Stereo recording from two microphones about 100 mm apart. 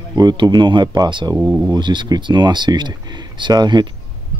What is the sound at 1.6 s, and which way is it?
Speech, 45° right (ahead or behind).